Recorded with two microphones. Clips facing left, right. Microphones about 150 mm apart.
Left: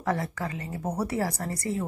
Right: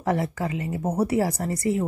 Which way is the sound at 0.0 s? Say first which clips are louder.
Right 4 dB; 25° right (ahead or behind).